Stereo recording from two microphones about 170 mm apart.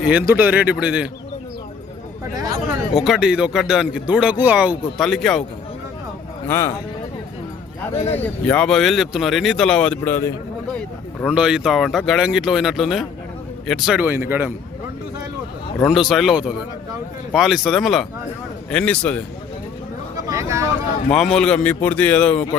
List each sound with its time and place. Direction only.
0.0 s a man's voice: 10° right (ahead or behind)
2.9 s speech: 5° right (ahead or behind)
6.5 s a man's voice: 15° left (ahead or behind)
7.9 s speech: 40° left (ahead or behind)
8.2 s speech: 10° left (ahead or behind)
11.3 s a man's voice: 5° right (ahead or behind)
15.9 s a man's voice: centre (ahead or behind)
20.2 s speech: 20° right (ahead or behind)
21.1 s a man's voice: 5° left (ahead or behind)